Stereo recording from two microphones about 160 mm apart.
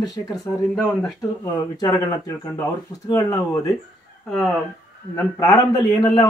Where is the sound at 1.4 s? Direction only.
20° left (ahead or behind).